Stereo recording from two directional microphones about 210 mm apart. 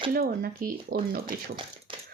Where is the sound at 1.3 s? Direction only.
25° right (ahead or behind).